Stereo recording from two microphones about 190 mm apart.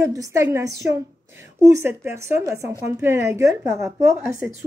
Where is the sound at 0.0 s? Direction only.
15° right (ahead or behind).